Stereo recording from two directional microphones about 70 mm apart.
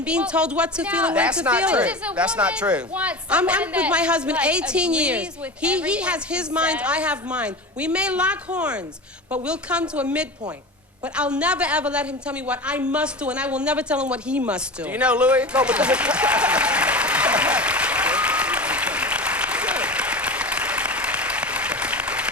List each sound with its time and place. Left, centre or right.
0.0 s a woman's voice: centre
11.1 s a woman's voice: centre
14.8 s applause: centre